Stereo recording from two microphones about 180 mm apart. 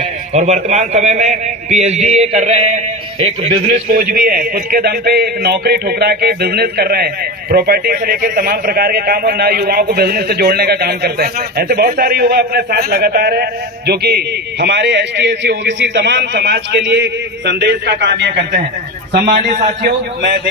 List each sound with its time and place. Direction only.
0.0 s a man's voice: 40° right (ahead or behind)
3.7 s a man's voice: 50° right (ahead or behind); by 19.5 s 65° right (ahead or behind)
19.8 s a man's voice: 55° right (ahead or behind)